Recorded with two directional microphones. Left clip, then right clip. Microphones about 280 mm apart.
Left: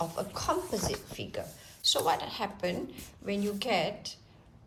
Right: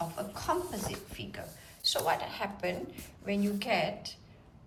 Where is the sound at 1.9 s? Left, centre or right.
Centre.